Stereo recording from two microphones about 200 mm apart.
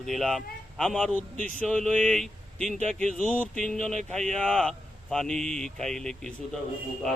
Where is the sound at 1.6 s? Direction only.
5° left (ahead or behind).